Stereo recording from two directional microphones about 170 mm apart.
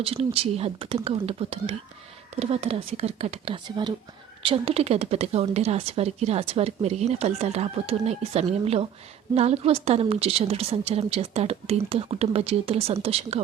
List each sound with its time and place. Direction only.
0.0 s a woman's voice: 35° right (ahead or behind)